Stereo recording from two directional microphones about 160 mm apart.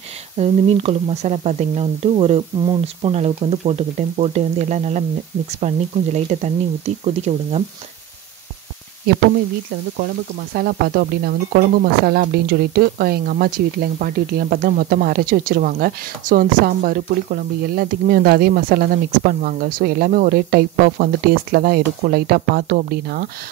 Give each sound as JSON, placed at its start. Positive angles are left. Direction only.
{"t": 0.4, "sound": "speech", "side_deg": -40}
{"t": 9.9, "sound": "speech", "side_deg": -70}